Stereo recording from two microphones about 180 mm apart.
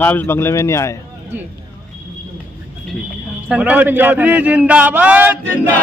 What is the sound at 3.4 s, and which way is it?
A man's voice, 5° right (ahead or behind).